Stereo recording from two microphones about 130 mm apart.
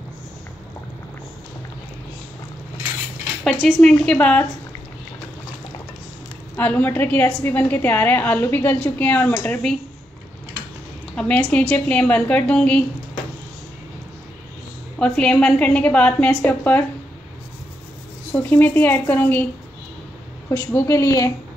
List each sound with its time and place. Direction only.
3.4 s a woman's voice: 5° left (ahead or behind)
6.5 s a woman's voice: 15° left (ahead or behind)
11.1 s a woman's voice: 10° left (ahead or behind)
15.0 s a woman's voice: 10° left (ahead or behind)
18.3 s a woman's voice: 15° left (ahead or behind)
20.4 s a woman's voice: 20° left (ahead or behind)